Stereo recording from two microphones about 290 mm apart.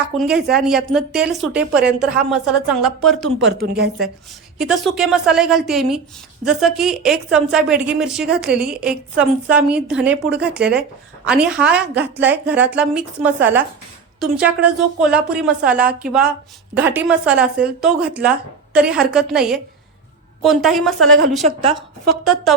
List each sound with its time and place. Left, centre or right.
0.2 s a woman's voice: centre
3.3 s speech: right
4.5 s a woman's voice: centre
21.4 s a woman's voice: centre